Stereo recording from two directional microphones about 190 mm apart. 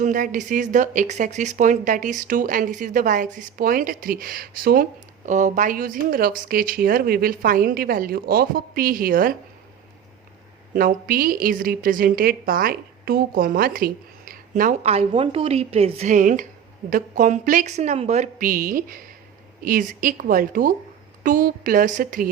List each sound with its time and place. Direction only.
0.0 s speech: 45° right (ahead or behind)
10.8 s speech: 50° right (ahead or behind)